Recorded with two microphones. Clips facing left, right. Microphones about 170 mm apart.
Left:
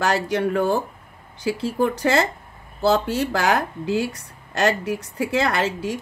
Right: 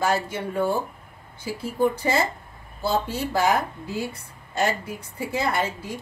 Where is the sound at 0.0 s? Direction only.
80° left.